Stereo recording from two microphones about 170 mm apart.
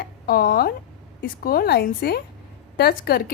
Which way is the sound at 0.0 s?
60° left (ahead or behind).